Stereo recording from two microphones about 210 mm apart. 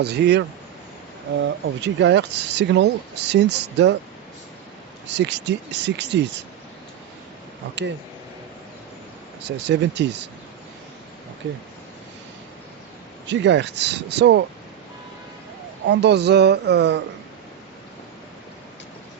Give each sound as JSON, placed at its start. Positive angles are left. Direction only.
{"t": 0.0, "sound": "speech", "side_deg": -50}
{"t": 5.0, "sound": "speech", "side_deg": -55}
{"t": 9.6, "sound": "speech", "side_deg": -55}
{"t": 13.2, "sound": "speech", "side_deg": -60}
{"t": 15.9, "sound": "speech", "side_deg": -55}